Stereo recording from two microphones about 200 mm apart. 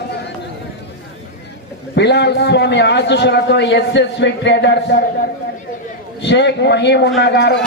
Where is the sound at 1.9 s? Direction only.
55° left (ahead or behind).